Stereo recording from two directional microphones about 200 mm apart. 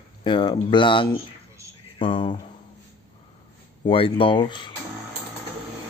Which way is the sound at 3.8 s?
25° left (ahead or behind).